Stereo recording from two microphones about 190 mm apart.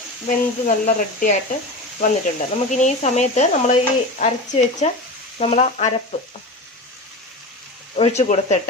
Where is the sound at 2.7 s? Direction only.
40° left (ahead or behind).